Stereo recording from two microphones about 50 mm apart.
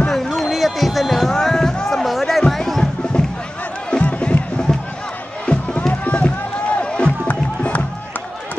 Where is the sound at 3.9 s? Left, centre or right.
Left.